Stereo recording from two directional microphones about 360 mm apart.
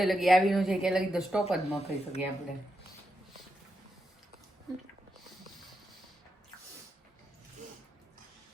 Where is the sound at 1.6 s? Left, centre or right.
Centre.